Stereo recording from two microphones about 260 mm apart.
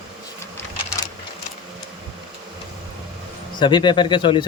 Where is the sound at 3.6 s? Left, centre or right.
Centre.